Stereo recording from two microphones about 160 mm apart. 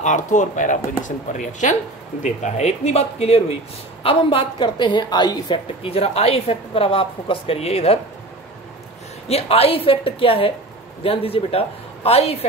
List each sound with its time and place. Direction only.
0.0 s a woman's voice: 50° left (ahead or behind)
9.3 s a woman's voice: 40° left (ahead or behind)